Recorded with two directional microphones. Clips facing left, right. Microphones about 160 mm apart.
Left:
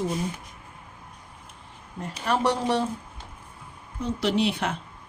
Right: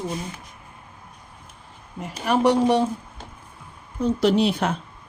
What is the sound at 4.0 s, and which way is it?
Speech, 45° right (ahead or behind).